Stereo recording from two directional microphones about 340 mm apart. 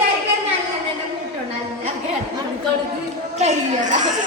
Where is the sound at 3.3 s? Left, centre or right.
Right.